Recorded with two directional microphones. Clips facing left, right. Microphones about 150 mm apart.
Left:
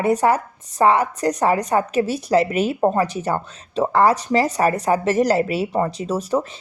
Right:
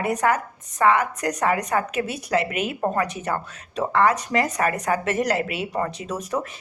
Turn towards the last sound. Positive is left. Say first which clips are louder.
# left 6 dB
turn(degrees=30)  # may be behind; listen again after turning